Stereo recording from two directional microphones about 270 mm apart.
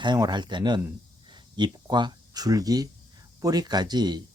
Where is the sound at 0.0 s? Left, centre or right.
Centre.